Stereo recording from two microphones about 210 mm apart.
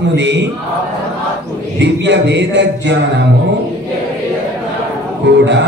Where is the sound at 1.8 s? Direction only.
55° right (ahead or behind).